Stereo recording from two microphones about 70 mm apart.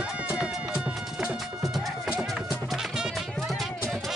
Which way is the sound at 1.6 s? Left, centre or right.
Centre.